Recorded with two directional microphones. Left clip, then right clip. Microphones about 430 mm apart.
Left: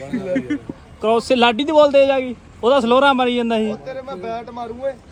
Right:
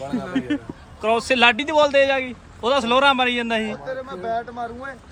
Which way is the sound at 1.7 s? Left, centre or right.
Right.